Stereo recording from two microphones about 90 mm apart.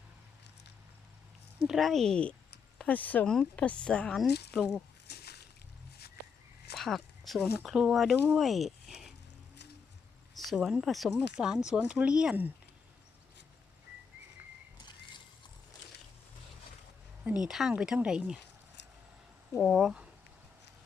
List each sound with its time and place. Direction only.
1.6 s speech: centre (ahead or behind)
6.7 s a sound: centre (ahead or behind)
7.6 s speech: 5° right (ahead or behind)
10.3 s speech: centre (ahead or behind)
17.2 s speech: 10° right (ahead or behind)
19.5 s speech: centre (ahead or behind)